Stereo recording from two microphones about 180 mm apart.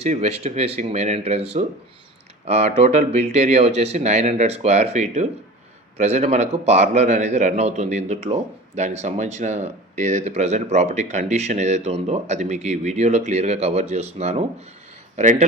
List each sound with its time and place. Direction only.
0.0 s speech: 35° right (ahead or behind)